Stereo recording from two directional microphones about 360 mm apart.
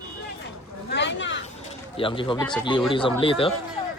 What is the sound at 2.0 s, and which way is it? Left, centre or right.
Speech, centre.